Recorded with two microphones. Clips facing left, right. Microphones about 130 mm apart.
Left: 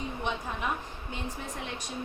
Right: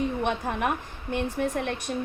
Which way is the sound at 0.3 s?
60° right (ahead or behind).